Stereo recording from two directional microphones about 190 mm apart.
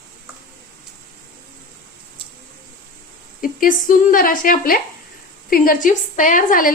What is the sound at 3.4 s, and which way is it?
A woman's voice, 45° left (ahead or behind).